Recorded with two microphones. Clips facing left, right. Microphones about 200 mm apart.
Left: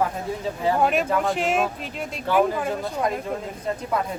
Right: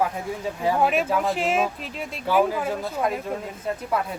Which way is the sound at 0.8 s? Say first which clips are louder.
Even; 5° right (ahead or behind).